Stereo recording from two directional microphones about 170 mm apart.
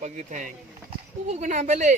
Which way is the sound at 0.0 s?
45° right (ahead or behind).